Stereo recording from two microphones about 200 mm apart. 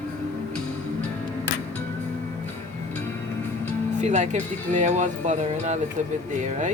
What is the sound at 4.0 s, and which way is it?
Speech, 35° right (ahead or behind).